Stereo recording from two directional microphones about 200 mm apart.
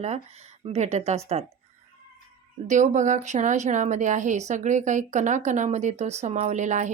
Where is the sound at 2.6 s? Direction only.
40° right (ahead or behind).